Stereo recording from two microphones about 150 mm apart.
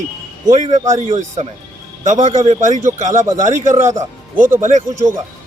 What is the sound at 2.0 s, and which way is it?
A man's voice, 55° right (ahead or behind).